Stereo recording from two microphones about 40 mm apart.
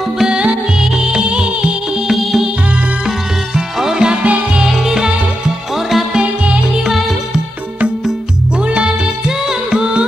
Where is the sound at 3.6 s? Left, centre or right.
Centre.